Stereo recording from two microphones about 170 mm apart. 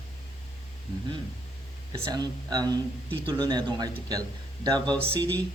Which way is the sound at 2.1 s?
25° right (ahead or behind).